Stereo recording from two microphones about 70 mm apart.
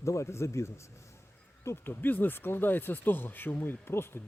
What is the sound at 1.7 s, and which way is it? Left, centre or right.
Speech, left.